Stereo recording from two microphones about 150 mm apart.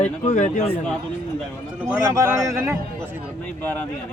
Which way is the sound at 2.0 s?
20° right (ahead or behind).